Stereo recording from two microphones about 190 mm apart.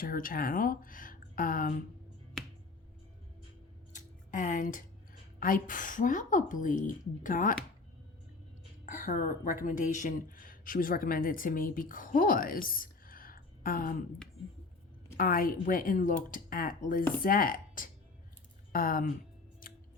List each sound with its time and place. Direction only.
0.0 s a woman's voice: 45° left (ahead or behind)
3.9 s music: 40° left (ahead or behind)
5.4 s a woman's voice: 45° left (ahead or behind)
8.9 s a woman's voice: 45° left (ahead or behind)
15.2 s a woman's voice: 50° left (ahead or behind)
19.6 s music: 45° left (ahead or behind)